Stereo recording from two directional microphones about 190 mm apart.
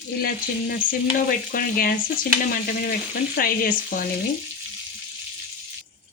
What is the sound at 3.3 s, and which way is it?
Frying, 50° left (ahead or behind).